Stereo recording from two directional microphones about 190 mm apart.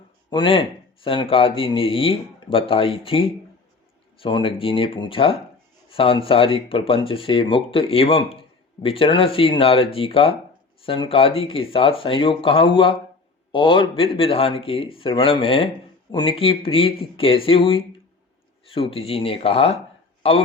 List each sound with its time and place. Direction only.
0.3 s speech: 25° left (ahead or behind)